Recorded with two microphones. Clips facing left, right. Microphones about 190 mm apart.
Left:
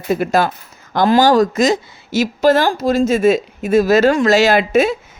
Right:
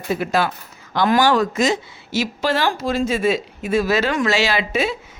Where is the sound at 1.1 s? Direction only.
35° left (ahead or behind).